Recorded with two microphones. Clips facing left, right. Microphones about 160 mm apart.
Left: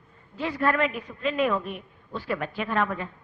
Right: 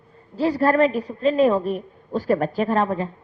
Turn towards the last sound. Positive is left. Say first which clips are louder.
# right 6 dB
turn(degrees=-35)  # may be behind; listen again after turning